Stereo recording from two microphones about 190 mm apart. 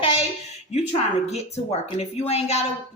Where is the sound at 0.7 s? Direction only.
35° left (ahead or behind).